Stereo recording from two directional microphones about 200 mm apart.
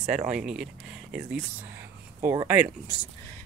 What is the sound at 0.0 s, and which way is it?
Speech, 40° right (ahead or behind).